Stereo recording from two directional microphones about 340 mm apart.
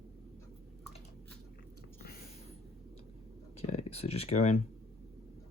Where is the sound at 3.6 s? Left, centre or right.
Centre.